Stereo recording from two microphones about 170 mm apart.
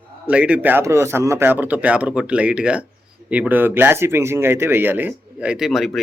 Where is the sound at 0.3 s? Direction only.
5° right (ahead or behind).